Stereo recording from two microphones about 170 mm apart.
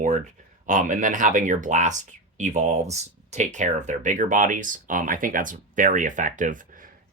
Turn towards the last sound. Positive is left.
turn(degrees=-50)  # may be behind; listen again after turning